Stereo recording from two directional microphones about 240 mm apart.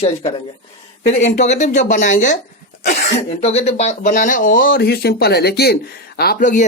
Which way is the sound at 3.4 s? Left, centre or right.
Left.